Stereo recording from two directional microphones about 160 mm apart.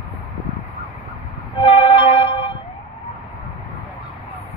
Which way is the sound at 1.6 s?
35° left (ahead or behind).